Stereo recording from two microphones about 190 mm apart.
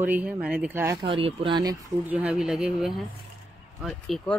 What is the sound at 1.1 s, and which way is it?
Speech, 30° right (ahead or behind).